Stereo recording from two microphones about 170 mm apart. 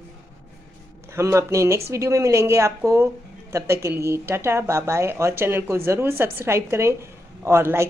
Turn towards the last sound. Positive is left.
turn(degrees=-15)  # may be behind; listen again after turning